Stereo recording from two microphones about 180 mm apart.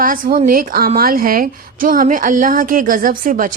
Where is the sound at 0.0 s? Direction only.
50° right (ahead or behind).